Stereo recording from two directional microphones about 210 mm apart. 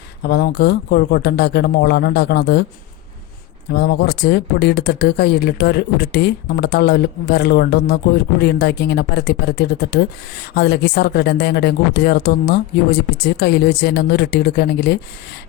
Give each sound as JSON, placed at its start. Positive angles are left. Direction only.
{"t": 0.2, "sound": "speech", "side_deg": 50}
{"t": 3.7, "sound": "speech", "side_deg": 50}